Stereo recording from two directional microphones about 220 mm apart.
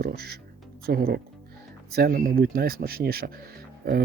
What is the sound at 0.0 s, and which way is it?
Speech, 45° right (ahead or behind).